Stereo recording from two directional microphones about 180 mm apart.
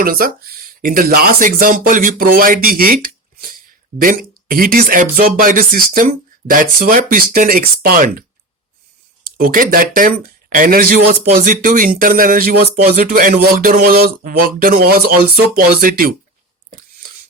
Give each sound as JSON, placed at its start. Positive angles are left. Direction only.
{"t": 0.0, "sound": "speech", "side_deg": -55}
{"t": 9.4, "sound": "speech", "side_deg": -50}
{"t": 13.0, "sound": "a sound", "side_deg": -55}
{"t": 15.5, "sound": "speech", "side_deg": -55}